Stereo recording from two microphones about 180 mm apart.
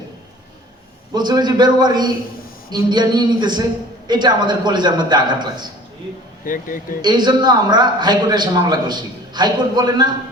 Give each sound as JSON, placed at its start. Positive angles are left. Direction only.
{"t": 1.1, "sound": "a man's voice", "side_deg": -25}
{"t": 6.4, "sound": "speech", "side_deg": 50}
{"t": 7.0, "sound": "a man's voice", "side_deg": -25}